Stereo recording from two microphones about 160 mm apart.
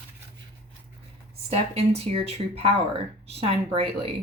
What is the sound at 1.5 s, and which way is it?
Speech, 40° right (ahead or behind).